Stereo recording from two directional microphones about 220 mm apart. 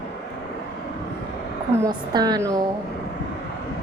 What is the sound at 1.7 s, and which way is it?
Speech, 15° right (ahead or behind).